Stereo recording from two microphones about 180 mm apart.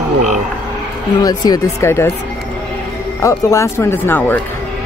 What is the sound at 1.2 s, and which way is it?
Speech, 20° left (ahead or behind).